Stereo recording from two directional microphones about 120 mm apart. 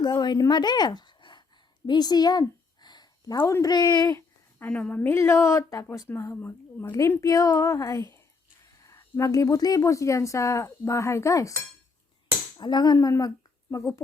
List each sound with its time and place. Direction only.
0.0 s a woman's voice: 35° left (ahead or behind)
1.9 s a sound: 35° left (ahead or behind)
3.5 s a woman's voice: 30° left (ahead or behind)
4.6 s speech: 10° left (ahead or behind)
12.5 s speech: 35° left (ahead or behind)